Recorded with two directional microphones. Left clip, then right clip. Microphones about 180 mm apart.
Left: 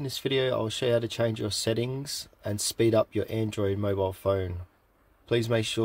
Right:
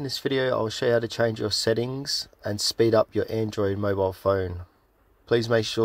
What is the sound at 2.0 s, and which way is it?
Speech, 20° left (ahead or behind).